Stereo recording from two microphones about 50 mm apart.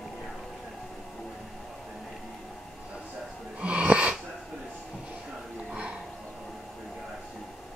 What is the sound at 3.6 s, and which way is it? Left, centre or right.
Wheeze, right.